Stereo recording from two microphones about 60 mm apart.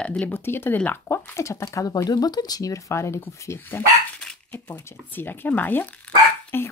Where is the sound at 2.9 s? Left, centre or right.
Left.